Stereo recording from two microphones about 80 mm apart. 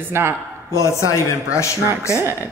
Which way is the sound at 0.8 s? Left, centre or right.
Left.